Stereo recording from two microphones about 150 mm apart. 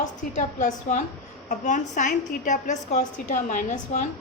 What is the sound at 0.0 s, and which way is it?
A woman's voice, 55° left (ahead or behind).